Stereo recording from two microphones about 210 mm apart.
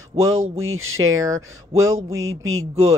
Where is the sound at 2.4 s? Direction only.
75° right (ahead or behind).